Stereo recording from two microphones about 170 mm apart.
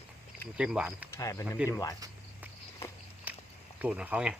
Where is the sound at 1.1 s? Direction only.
20° left (ahead or behind).